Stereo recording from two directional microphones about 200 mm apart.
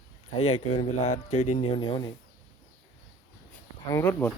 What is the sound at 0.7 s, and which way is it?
Speech, 30° left (ahead or behind).